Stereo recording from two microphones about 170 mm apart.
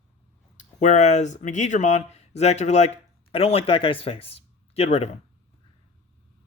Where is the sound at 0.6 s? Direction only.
45° left (ahead or behind).